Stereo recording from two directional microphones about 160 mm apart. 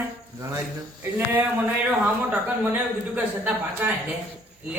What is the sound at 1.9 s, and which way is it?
Speech, 10° right (ahead or behind).